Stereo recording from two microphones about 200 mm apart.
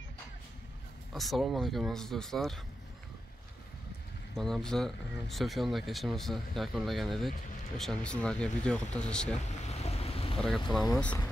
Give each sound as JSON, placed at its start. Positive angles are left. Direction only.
{"t": 1.1, "sound": "speech", "side_deg": 0}
{"t": 4.4, "sound": "speech", "side_deg": 0}
{"t": 9.4, "sound": "boat", "side_deg": 35}
{"t": 10.7, "sound": "speech", "side_deg": 0}